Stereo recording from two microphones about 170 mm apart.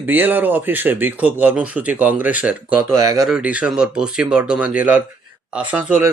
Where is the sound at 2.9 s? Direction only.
20° right (ahead or behind).